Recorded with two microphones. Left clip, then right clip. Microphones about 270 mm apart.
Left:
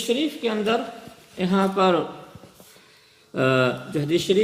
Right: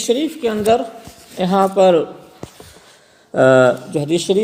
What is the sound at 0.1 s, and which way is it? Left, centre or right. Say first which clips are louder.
Speech: right 6 dB; right.